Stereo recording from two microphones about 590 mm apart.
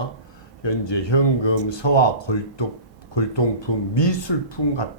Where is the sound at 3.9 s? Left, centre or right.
Left.